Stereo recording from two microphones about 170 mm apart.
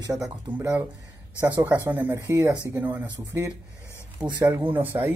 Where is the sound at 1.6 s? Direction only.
10° right (ahead or behind).